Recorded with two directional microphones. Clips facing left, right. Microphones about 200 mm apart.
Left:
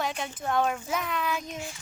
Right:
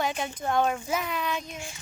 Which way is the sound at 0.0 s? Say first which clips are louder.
Right 2 dB; centre (ahead or behind).